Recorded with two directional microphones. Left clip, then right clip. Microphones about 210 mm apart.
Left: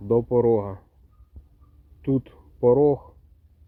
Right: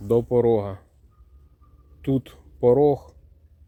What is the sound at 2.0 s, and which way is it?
Speech, 10° right (ahead or behind).